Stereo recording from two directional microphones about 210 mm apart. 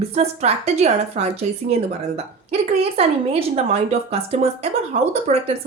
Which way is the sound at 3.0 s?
30° right (ahead or behind).